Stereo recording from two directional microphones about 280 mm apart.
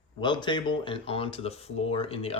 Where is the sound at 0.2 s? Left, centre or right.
Centre.